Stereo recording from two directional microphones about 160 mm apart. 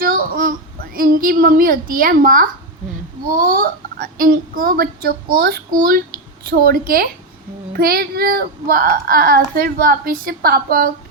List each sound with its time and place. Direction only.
0.0 s a sound: 60° right (ahead or behind)
0.9 s speech: 65° right (ahead or behind)
3.5 s speech: 65° right (ahead or behind)